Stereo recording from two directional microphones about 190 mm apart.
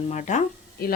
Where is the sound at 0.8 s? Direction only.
50° left (ahead or behind).